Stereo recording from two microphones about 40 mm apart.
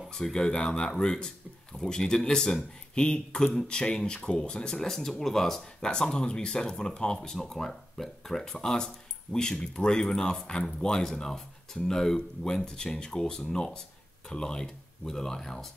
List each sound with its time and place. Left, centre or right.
0.1 s speech: centre
7.3 s speech: centre
8.5 s speech: centre